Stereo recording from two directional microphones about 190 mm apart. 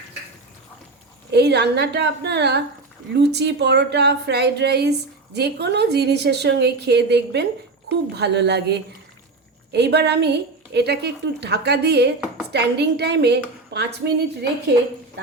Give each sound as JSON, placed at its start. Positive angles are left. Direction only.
{"t": 1.3, "sound": "a woman's voice", "side_deg": -60}